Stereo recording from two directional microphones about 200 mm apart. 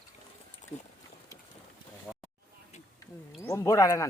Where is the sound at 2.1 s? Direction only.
Centre (ahead or behind).